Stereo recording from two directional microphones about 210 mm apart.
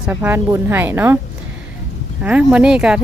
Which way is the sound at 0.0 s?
5° right (ahead or behind).